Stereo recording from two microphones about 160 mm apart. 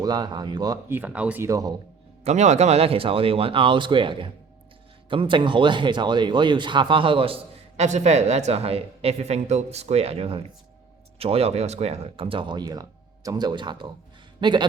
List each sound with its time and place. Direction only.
0.0 s speech: 25° right (ahead or behind)
0.9 s speech: 10° right (ahead or behind)
2.2 s speech: 45° right (ahead or behind)
7.8 s speech: 45° right (ahead or behind); by 14.7 s 30° right (ahead or behind)